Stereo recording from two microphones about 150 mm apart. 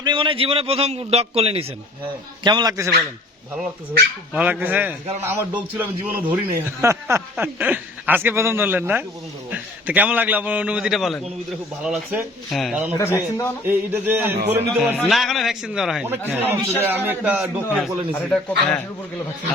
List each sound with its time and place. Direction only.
0.0 s a man's voice: 35° right (ahead or behind)
2.4 s speech: 30° right (ahead or behind)
4.4 s a man's voice: 10° right (ahead or behind)
13.0 s speech: 20° left (ahead or behind)
13.7 s speech: 15° right (ahead or behind)
14.9 s speech: centre (ahead or behind)
18.1 s speech: 10° left (ahead or behind)